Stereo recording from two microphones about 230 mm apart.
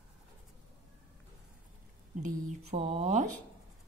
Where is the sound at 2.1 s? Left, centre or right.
Right.